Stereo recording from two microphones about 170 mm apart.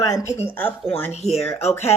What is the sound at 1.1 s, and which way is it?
Speech, 40° left (ahead or behind).